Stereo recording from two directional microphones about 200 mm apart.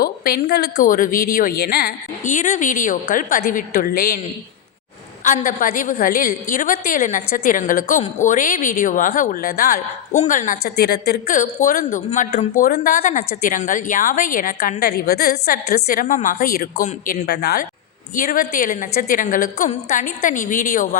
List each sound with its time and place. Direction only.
0.0 s a woman's voice: 50° left (ahead or behind)
5.2 s a woman's voice: 40° left (ahead or behind)